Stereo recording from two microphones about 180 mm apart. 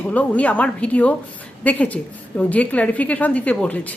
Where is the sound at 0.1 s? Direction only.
10° left (ahead or behind).